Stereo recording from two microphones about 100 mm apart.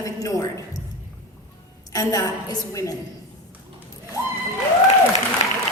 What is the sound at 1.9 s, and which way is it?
A woman's voice, 35° left (ahead or behind).